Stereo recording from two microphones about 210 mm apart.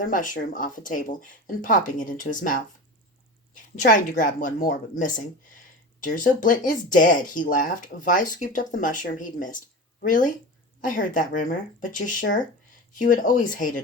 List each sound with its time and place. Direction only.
0.0 s a woman's voice: 40° left (ahead or behind)